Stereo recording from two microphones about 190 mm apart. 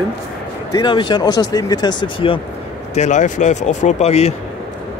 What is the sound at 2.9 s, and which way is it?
Speech, 40° left (ahead or behind).